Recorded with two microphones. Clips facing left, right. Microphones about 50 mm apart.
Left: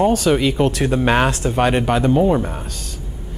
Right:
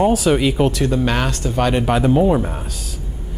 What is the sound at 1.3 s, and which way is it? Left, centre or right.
Speech, centre.